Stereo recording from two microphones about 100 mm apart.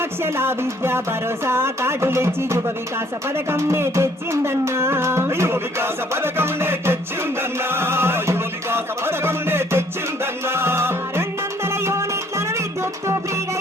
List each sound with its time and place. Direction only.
0.2 s music: 25° right (ahead or behind)